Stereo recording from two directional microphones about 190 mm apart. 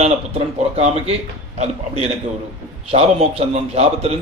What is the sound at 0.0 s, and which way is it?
A man's voice, 35° right (ahead or behind).